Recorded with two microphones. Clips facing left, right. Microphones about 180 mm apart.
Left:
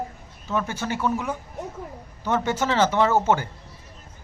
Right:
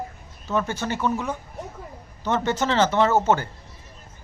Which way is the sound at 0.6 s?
10° left (ahead or behind).